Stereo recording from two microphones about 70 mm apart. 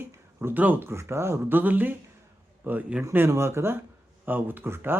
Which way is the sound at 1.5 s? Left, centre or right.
Right.